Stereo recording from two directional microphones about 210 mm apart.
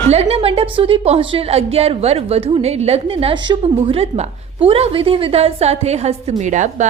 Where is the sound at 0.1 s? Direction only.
30° right (ahead or behind).